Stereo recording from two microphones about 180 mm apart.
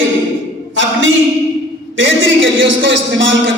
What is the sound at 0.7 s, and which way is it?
A man's voice, 90° right.